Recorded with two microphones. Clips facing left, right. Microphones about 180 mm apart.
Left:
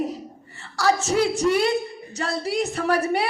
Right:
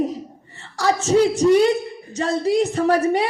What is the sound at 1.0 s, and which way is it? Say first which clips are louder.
A woman's voice: right 5 dB; 35° right (ahead or behind).